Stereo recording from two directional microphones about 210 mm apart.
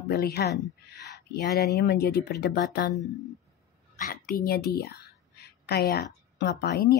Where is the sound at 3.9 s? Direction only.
40° left (ahead or behind).